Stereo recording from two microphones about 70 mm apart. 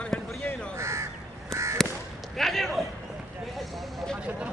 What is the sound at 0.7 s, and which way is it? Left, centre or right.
Crow, right.